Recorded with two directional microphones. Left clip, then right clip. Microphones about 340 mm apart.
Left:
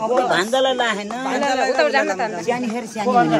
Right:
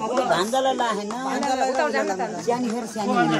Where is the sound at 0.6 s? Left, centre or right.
Centre.